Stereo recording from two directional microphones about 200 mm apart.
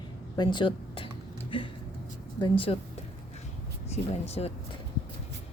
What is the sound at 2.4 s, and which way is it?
Speech, 25° left (ahead or behind).